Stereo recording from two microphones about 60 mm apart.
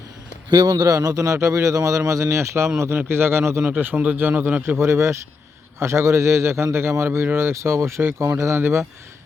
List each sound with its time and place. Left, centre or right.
0.6 s a man's voice: right
2.0 s a man's voice: right
2.9 s a man's voice: right
3.6 s a man's voice: right
4.8 s a man's voice: right